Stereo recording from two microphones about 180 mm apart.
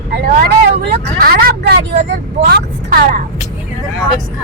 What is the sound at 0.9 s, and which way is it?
Vehicle, 60° right (ahead or behind).